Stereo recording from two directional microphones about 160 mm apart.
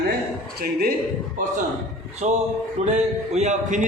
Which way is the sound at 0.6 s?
70° right (ahead or behind).